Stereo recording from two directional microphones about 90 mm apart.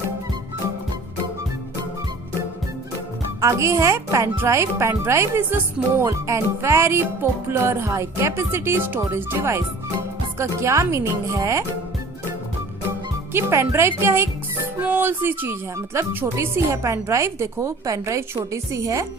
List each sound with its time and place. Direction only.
3.4 s speech: 35° right (ahead or behind)
4.8 s music: 30° right (ahead or behind)
10.3 s speech: 30° right (ahead or behind)
13.3 s music: 30° right (ahead or behind)
14.8 s speech: 20° right (ahead or behind)